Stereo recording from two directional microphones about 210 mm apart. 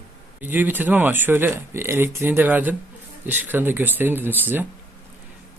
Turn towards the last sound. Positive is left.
turn(degrees=-10)  # may be behind; listen again after turning